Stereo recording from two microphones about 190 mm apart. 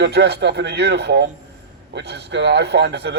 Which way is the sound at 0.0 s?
60° right (ahead or behind).